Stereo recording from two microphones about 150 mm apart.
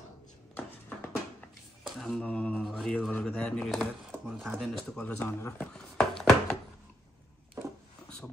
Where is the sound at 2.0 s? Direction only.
5° left (ahead or behind).